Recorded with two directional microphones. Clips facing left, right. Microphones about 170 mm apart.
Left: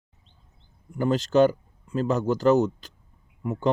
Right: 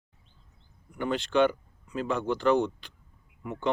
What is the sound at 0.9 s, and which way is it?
Speech, 40° left (ahead or behind).